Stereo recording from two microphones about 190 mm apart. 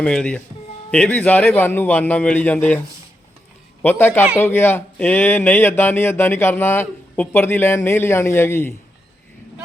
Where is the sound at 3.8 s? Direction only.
10° left (ahead or behind).